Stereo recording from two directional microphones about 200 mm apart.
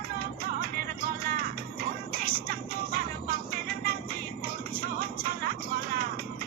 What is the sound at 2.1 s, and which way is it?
Music, 45° right (ahead or behind).